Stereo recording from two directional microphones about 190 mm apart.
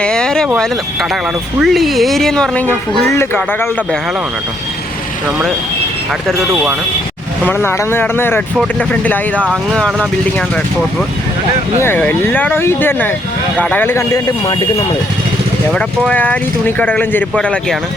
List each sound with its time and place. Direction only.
0.0 s speech: 5° left (ahead or behind)
1.6 s speech: centre (ahead or behind)
7.4 s speech: 10° left (ahead or behind)
11.8 s speech: 10° left (ahead or behind)
15.7 s speech: 5° left (ahead or behind)